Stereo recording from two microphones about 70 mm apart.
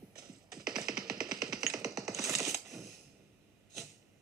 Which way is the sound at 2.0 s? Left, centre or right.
Right.